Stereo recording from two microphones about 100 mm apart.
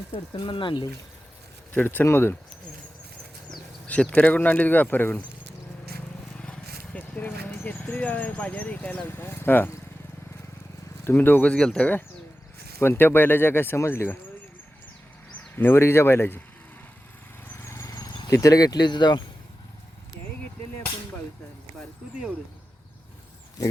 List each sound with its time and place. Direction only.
0.3 s speech: 50° left (ahead or behind)
1.7 s speech: 20° left (ahead or behind)
3.8 s speech: 15° left (ahead or behind)
6.4 s a sound: 10° left (ahead or behind)
11.0 s speech: 20° left (ahead or behind)
15.5 s speech: 25° left (ahead or behind)
17.5 s vehicle: 25° left (ahead or behind)
18.3 s speech: 35° left (ahead or behind)